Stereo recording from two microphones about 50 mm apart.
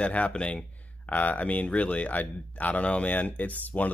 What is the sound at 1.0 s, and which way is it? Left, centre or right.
Speech, left.